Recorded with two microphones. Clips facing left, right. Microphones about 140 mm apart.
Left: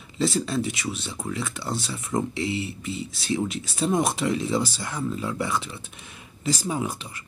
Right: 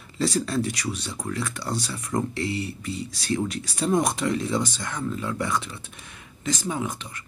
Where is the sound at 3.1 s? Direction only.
Centre (ahead or behind).